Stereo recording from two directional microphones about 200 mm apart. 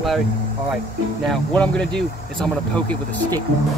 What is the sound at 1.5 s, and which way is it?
Speech, 5° left (ahead or behind).